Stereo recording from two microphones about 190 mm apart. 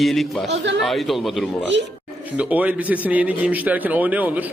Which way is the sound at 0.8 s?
Centre (ahead or behind).